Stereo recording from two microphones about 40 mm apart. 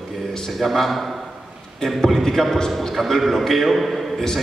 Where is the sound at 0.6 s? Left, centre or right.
Centre.